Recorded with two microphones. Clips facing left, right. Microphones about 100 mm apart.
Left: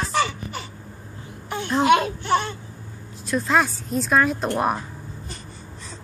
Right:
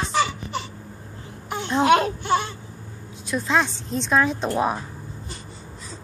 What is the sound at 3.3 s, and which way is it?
A woman's voice, centre (ahead or behind).